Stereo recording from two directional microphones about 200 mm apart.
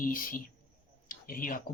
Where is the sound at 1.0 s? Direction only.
45° left (ahead or behind).